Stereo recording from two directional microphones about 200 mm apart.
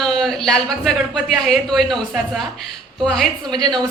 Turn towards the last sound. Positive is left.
turn(degrees=-20)  # may be behind; listen again after turning